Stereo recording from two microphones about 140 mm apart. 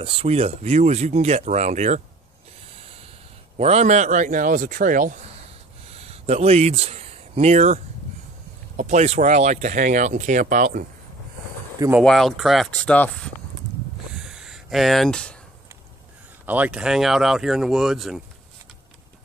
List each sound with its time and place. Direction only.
0.0 s speech: 45° right (ahead or behind)
2.8 s snort: 45° right (ahead or behind)
3.5 s speech: 50° right (ahead or behind); by 5.2 s 70° right (ahead or behind)
5.9 s speech: 45° right (ahead or behind); by 10.9 s 75° right (ahead or behind)
12.0 s speech: 5° left (ahead or behind)
14.1 s a sound: 5° right (ahead or behind)
16.4 s speech: 10° right (ahead or behind)